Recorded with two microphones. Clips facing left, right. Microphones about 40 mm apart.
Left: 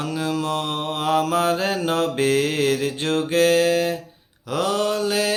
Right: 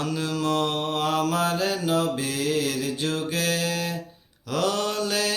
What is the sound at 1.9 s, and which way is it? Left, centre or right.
Mantra, left.